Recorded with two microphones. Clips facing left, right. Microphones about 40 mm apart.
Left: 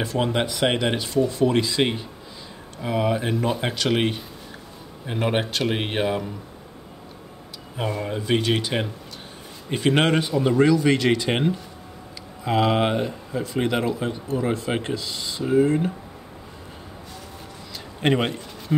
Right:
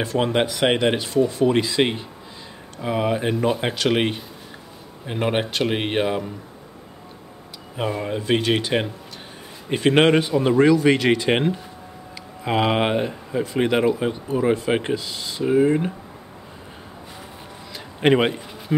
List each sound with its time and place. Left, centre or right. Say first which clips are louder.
0.0 s speech: right 3 dB; centre
7.7 s speech: right 2 dB; centre
15.4 s speech: right 2 dB; centre
17.7 s a sound: right 4 dB; centre